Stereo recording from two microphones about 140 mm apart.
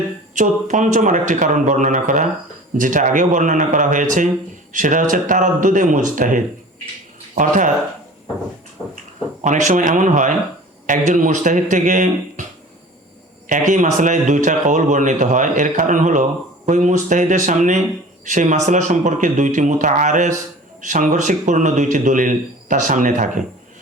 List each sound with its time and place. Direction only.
0.3 s a man's voice: 65° right (ahead or behind)
8.8 s a sound: 5° right (ahead or behind)
9.4 s a man's voice: 60° right (ahead or behind)
13.5 s a man's voice: 65° right (ahead or behind)